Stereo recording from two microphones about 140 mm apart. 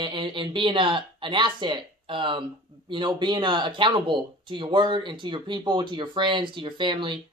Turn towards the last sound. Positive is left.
turn(degrees=-35)  # may be behind; listen again after turning